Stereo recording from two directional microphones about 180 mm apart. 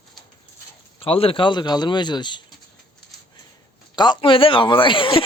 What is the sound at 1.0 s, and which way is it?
Speech, 30° left (ahead or behind).